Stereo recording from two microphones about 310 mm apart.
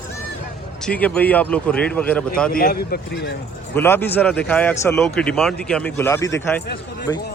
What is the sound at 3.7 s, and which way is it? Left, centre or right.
A man's voice, centre.